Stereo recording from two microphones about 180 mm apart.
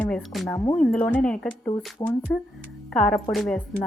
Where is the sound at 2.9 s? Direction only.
5° left (ahead or behind).